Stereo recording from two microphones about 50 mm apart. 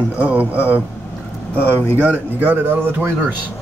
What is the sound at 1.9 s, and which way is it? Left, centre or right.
A man's voice, right.